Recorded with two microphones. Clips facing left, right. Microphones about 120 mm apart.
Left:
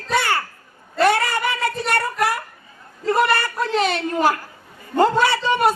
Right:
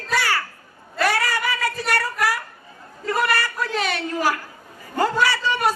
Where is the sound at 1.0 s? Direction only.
25° left (ahead or behind).